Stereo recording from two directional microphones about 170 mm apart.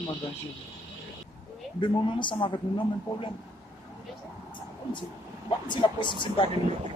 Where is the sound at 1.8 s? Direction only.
30° left (ahead or behind).